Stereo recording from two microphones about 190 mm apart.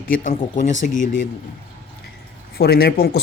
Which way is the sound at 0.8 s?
40° left (ahead or behind).